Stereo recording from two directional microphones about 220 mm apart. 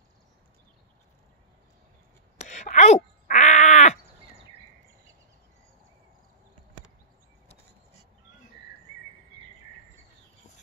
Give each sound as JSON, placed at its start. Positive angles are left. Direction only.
{"t": 2.4, "sound": "wail", "side_deg": 35}